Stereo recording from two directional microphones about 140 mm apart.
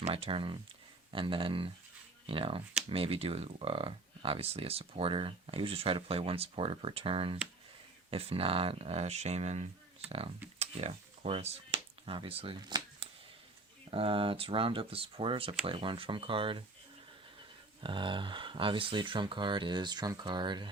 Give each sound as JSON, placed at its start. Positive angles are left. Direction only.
{"t": 0.0, "sound": "speech", "side_deg": -45}
{"t": 10.6, "sound": "a sound", "side_deg": -50}
{"t": 13.9, "sound": "speech", "side_deg": -40}
{"t": 17.7, "sound": "speech", "side_deg": -35}